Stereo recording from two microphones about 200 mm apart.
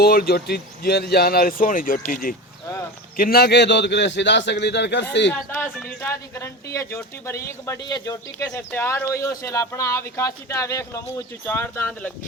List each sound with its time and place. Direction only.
0.0 s a man's voice: 50° left (ahead or behind)
5.3 s speech: 10° left (ahead or behind)